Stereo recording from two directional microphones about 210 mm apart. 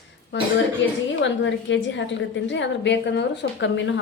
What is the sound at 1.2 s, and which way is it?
A woman's voice, 60° left (ahead or behind).